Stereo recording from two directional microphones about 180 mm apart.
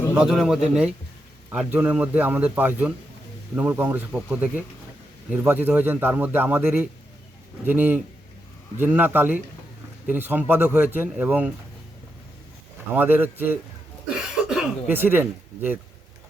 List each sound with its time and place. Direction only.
0.2 s a man's voice: centre (ahead or behind)
12.9 s a man's voice: 10° right (ahead or behind)
14.2 s a sound: 10° right (ahead or behind)